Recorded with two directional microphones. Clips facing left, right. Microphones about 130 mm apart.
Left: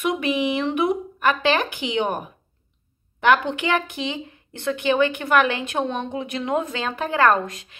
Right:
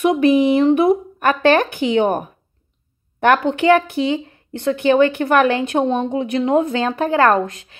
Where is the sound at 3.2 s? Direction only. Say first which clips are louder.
Right 6 dB; 40° right (ahead or behind).